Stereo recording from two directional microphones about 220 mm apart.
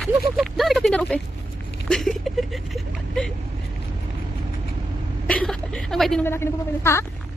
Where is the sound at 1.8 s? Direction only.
Centre (ahead or behind).